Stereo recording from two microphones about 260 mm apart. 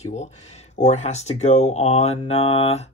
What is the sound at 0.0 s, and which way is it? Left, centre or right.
Speech, left.